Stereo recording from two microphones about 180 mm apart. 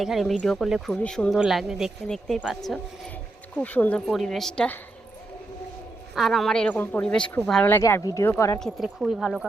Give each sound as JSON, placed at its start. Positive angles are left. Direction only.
{"t": 0.0, "sound": "speech", "side_deg": 0}
{"t": 6.1, "sound": "speech", "side_deg": 0}
{"t": 8.5, "sound": "speech", "side_deg": 0}